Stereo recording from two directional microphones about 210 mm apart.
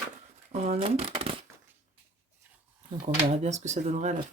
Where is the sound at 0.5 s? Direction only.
30° right (ahead or behind).